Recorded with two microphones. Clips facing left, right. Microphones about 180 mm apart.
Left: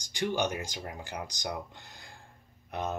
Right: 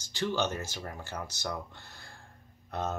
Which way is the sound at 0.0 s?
15° left (ahead or behind).